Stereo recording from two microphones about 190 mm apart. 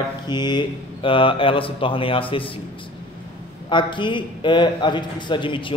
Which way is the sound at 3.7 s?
25° left (ahead or behind).